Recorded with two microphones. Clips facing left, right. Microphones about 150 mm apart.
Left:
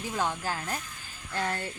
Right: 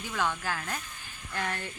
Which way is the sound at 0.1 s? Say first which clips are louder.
Even; 20° left (ahead or behind).